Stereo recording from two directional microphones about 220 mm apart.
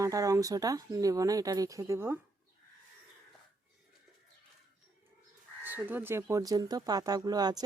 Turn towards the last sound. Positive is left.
turn(degrees=-20)  # may be behind; listen again after turning